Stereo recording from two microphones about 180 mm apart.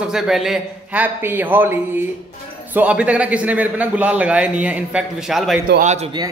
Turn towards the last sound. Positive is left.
turn(degrees=-40)  # may be behind; listen again after turning